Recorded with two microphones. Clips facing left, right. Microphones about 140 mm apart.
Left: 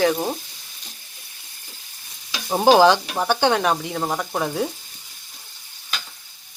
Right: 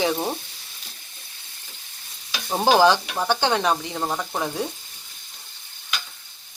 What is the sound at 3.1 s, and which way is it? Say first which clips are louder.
Frying: left 3 dB; 10° left (ahead or behind).